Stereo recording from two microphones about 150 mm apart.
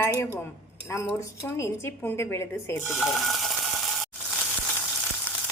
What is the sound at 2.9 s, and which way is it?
Stir, centre (ahead or behind).